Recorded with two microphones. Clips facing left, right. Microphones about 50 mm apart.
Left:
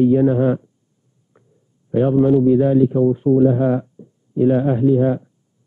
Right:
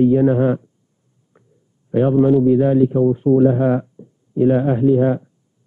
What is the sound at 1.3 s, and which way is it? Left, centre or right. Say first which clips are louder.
A man's voice: even; centre.